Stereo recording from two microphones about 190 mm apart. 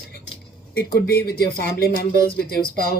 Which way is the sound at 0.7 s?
55° left (ahead or behind).